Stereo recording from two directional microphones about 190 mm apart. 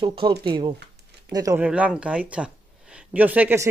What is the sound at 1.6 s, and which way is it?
A man's voice, 5° right (ahead or behind).